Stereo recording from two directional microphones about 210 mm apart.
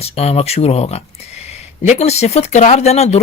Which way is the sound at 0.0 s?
30° left (ahead or behind).